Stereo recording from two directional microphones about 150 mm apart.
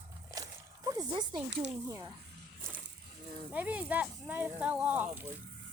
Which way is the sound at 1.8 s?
25° right (ahead or behind).